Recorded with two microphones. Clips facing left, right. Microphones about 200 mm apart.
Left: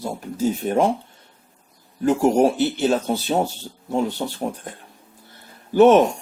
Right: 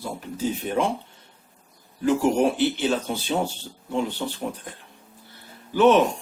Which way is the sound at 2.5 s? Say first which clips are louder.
Left 3 dB; 45° left (ahead or behind).